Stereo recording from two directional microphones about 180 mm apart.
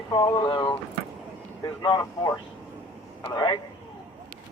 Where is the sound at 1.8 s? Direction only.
20° left (ahead or behind).